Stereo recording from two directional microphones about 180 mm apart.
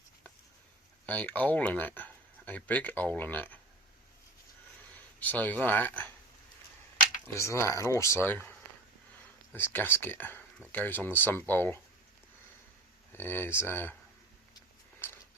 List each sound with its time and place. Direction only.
1.0 s speech: 10° left (ahead or behind)
5.2 s speech: 10° left (ahead or behind)
7.3 s speech: 15° left (ahead or behind)
13.1 s speech: 10° left (ahead or behind)
14.5 s a sound: 15° left (ahead or behind)